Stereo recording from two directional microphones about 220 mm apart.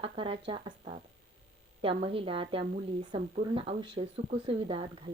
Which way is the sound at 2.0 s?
25° right (ahead or behind).